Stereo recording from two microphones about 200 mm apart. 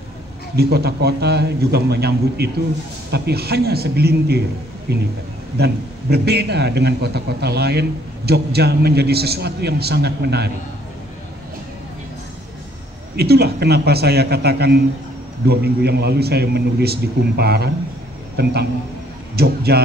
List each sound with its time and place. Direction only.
0.6 s a man's voice: 50° right (ahead or behind)
13.1 s a man's voice: 55° right (ahead or behind)